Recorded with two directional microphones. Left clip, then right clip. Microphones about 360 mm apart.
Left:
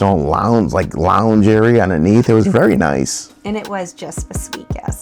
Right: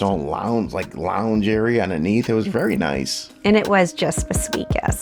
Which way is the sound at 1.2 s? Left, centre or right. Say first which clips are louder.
Left 8 dB; left.